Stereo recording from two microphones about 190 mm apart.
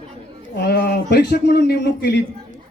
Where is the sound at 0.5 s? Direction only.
60° left (ahead or behind).